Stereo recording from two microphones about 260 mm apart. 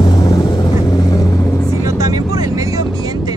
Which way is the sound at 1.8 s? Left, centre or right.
Centre.